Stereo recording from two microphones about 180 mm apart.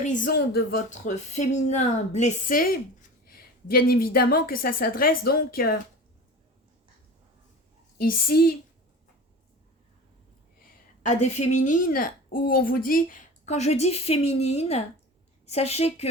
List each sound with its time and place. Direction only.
0.0 s speech: 45° left (ahead or behind)
0.9 s a woman's voice: 40° left (ahead or behind)
7.9 s a woman's voice: 55° left (ahead or behind)
11.0 s a woman's voice: 40° left (ahead or behind)